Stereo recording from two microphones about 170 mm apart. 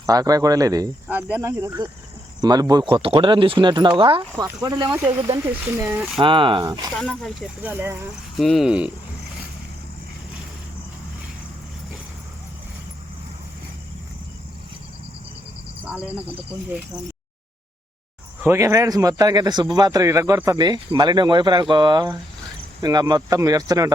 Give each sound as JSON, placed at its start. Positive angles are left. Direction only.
{"t": 0.0, "sound": "speech", "side_deg": -20}
{"t": 1.0, "sound": "speech", "side_deg": -10}
{"t": 4.4, "sound": "speech", "side_deg": -20}
{"t": 6.1, "sound": "speech", "side_deg": -30}
{"t": 6.9, "sound": "speech", "side_deg": 5}
{"t": 7.6, "sound": "speech", "side_deg": -10}
{"t": 8.4, "sound": "speech", "side_deg": 0}
{"t": 18.4, "sound": "speech", "side_deg": -15}